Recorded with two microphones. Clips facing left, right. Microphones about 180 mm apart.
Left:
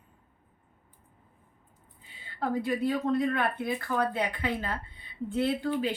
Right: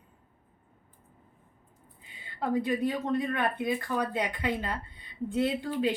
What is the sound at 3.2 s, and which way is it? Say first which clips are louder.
Speech: left 1 dB; 20° right (ahead or behind).